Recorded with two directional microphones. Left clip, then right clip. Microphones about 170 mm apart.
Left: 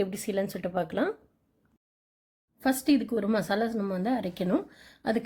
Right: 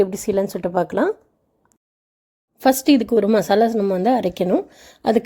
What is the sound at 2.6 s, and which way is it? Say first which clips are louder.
A woman's voice: right 10 dB; 45° right (ahead or behind).